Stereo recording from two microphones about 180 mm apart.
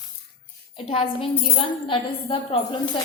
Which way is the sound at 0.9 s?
30° left (ahead or behind).